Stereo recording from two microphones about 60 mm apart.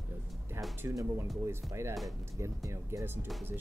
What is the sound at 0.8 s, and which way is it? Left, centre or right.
Speech, right.